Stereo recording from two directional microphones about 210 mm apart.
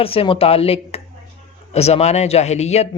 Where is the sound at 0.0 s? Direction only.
25° left (ahead or behind).